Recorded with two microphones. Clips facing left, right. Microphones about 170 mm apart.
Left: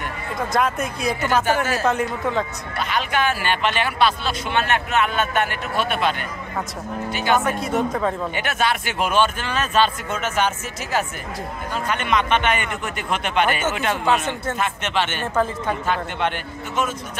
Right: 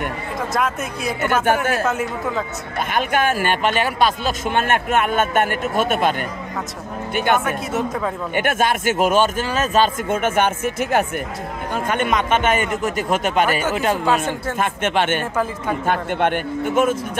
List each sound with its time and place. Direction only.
0.5 s speech: 5° right (ahead or behind)
1.2 s speech: 55° right (ahead or behind)
1.9 s speech: 5° right (ahead or behind)
2.8 s speech: 50° right (ahead or behind)
7.4 s speech: 5° right (ahead or behind)
8.4 s speech: 50° right (ahead or behind)
14.0 s a man's voice: 10° right (ahead or behind)
14.6 s speech: 50° right (ahead or behind)